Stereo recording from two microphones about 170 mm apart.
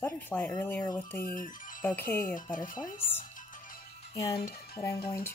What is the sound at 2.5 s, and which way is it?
Speech, 50° left (ahead or behind).